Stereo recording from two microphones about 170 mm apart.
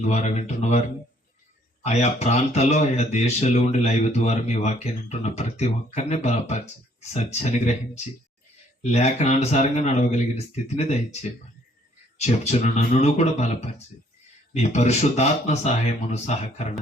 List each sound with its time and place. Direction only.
0.0 s speech: 40° left (ahead or behind)
1.8 s speech: 40° left (ahead or behind)
14.5 s speech: 40° left (ahead or behind)